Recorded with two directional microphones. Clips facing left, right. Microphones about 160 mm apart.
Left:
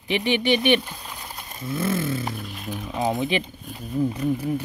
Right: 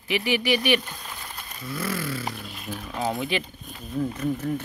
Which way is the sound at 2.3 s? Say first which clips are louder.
Left 3 dB; 15° left (ahead or behind).